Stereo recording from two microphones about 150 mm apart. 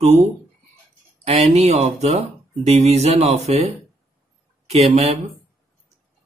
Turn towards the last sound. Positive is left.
turn(degrees=-45)  # may be behind; listen again after turning